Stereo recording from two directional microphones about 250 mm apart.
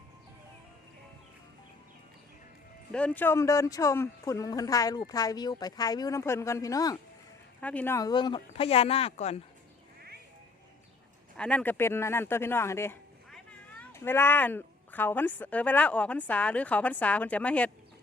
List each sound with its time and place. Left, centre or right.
2.9 s speech: centre; by 9.4 s left
11.3 s speech: centre